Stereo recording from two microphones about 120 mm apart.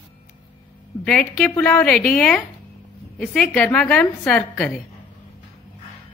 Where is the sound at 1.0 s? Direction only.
10° left (ahead or behind).